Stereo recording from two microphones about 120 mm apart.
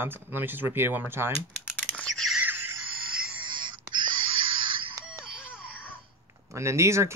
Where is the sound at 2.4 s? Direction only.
15° right (ahead or behind).